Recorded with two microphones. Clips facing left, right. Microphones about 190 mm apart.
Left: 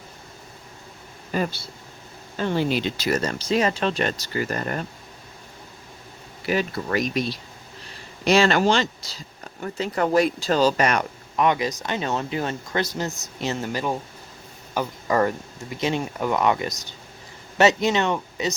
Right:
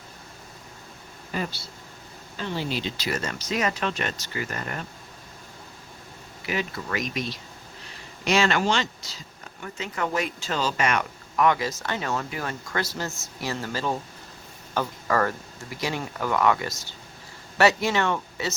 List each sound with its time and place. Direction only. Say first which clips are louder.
1.3 s speech: left 5 dB; 45° left (ahead or behind)
3.1 s speech: left 7 dB; 35° left (ahead or behind)
6.4 s speech: left 5 dB; 40° left (ahead or behind)
11.3 s speech: left 1 dB; 20° left (ahead or behind)